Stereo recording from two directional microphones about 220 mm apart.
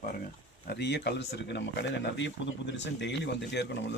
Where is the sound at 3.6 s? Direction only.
50° left (ahead or behind).